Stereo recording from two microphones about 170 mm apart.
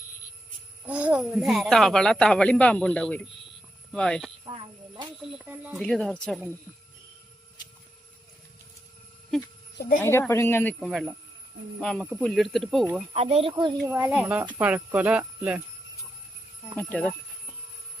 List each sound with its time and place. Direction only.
0.9 s speech: 10° right (ahead or behind)
4.4 s speech: 30° right (ahead or behind)
5.4 s speech: 10° right (ahead or behind)
5.8 s speech: 5° left (ahead or behind)
10.0 s speech: 15° left (ahead or behind)
13.1 s speech: 35° right (ahead or behind)
13.5 s a child's voice: 25° right (ahead or behind)
13.9 s speech: 10° right (ahead or behind)
16.7 s speech: 10° left (ahead or behind)